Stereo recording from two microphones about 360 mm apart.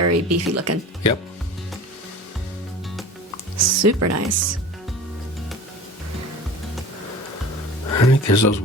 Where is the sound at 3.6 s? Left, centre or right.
Right.